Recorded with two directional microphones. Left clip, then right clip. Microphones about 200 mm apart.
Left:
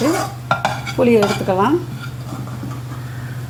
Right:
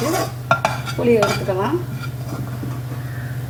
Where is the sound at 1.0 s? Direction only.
45° left (ahead or behind).